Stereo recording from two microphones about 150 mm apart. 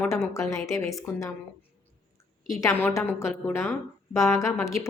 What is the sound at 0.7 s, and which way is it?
Speech, 20° left (ahead or behind).